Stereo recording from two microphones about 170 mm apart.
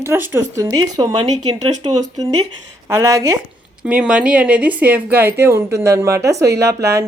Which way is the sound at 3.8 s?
5° right (ahead or behind).